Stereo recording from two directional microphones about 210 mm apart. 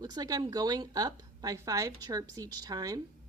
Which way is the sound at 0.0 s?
20° right (ahead or behind).